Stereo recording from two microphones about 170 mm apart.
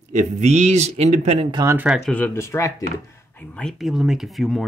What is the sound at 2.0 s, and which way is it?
Speech, 10° left (ahead or behind).